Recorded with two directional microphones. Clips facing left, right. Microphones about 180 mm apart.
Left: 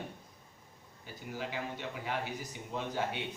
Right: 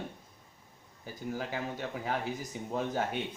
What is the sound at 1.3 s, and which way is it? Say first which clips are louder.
Speech: right 1 dB; 45° right (ahead or behind).